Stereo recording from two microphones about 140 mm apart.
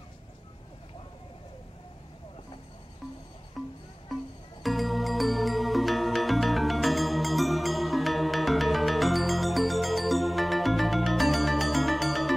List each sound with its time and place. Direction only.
3.6 s music: centre (ahead or behind)